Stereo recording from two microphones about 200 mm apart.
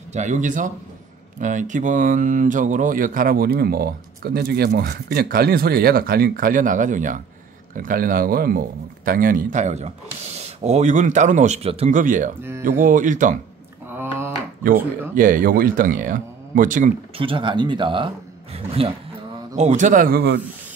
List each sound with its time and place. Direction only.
0.1 s speech: 35° right (ahead or behind)
12.4 s speech: 10° right (ahead or behind)
12.6 s speech: 40° right (ahead or behind)
13.8 s a sound: 10° right (ahead or behind)
15.1 s speech: 40° right (ahead or behind)
17.2 s speech: 25° right (ahead or behind); by 20.3 s 50° right (ahead or behind)